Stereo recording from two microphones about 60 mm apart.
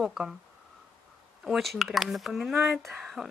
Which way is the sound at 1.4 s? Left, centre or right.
Centre.